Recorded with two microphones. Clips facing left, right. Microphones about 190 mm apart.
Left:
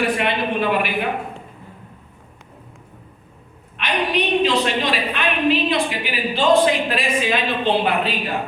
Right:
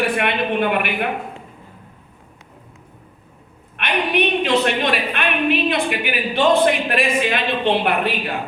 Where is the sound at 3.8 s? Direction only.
55° right (ahead or behind).